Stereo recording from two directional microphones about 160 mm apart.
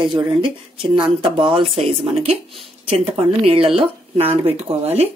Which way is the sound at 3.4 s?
35° right (ahead or behind).